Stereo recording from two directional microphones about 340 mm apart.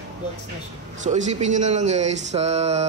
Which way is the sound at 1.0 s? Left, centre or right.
Centre.